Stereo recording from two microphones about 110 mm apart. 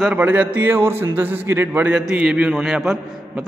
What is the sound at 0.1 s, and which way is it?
A man's voice, 15° right (ahead or behind).